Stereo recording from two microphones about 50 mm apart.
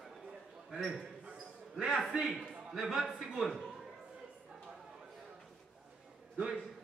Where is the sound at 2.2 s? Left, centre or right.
Centre.